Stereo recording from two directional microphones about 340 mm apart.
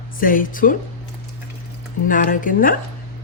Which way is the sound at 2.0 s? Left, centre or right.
Left.